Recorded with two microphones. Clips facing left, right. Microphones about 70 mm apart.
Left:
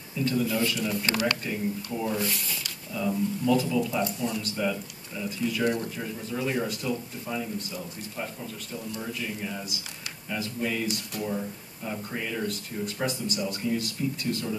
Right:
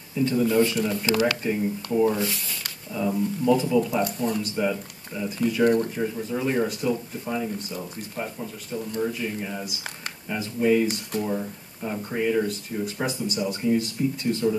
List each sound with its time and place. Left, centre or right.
0.2 s speech: right